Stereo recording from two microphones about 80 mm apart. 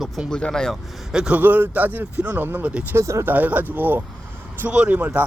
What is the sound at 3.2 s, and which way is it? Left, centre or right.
A man's voice, right.